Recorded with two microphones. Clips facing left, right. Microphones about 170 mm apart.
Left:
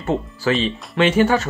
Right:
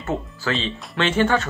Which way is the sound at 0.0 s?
20° left (ahead or behind).